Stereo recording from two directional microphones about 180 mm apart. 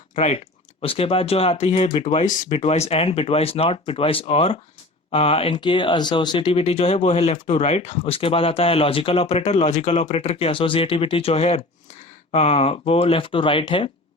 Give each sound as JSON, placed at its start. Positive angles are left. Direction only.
{"t": 0.2, "sound": "speech", "side_deg": 35}